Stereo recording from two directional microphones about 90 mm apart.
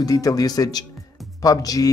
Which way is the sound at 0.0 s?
40° left (ahead or behind).